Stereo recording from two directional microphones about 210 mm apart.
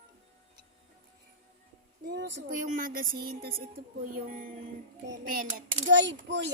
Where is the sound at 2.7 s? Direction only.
40° right (ahead or behind).